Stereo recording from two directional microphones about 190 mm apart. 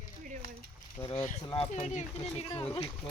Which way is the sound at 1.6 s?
40° left (ahead or behind).